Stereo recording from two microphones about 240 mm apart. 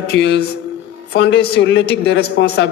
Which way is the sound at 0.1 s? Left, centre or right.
Left.